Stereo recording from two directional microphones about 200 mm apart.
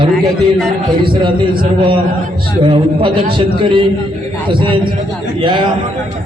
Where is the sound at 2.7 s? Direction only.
25° right (ahead or behind).